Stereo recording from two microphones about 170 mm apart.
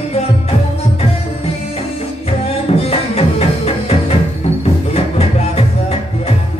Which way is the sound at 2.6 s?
35° left (ahead or behind).